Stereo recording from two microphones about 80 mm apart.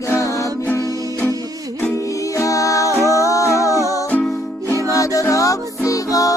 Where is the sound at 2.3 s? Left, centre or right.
Left.